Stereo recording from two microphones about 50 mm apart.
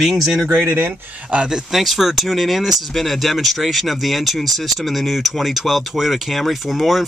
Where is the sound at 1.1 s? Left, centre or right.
Right.